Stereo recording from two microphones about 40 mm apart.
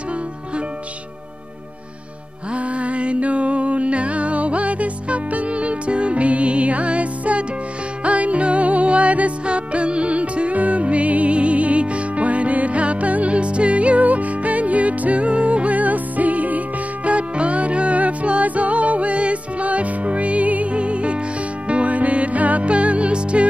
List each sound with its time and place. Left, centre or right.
2.5 s music: right